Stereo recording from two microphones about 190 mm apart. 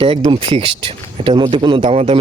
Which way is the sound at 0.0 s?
25° right (ahead or behind).